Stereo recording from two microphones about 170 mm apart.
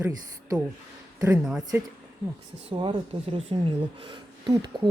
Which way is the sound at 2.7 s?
30° right (ahead or behind).